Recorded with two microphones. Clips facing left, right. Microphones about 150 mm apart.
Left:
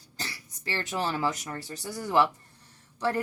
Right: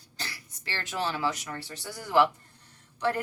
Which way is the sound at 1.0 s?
40° left (ahead or behind).